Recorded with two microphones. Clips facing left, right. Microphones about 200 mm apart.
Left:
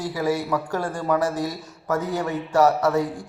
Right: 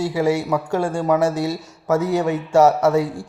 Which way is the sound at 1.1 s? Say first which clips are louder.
Right 4 dB; 80° right.